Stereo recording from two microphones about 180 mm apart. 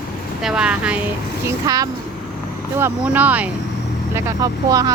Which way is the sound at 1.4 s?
20° right (ahead or behind).